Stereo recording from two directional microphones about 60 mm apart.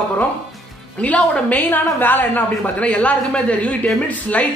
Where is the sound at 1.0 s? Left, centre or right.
Left.